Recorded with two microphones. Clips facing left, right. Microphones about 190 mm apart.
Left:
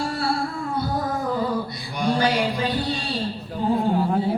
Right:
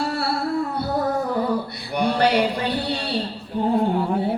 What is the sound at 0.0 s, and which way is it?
Music, 65° right (ahead or behind).